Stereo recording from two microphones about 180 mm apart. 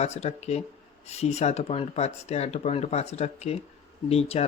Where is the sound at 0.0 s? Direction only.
35° left (ahead or behind).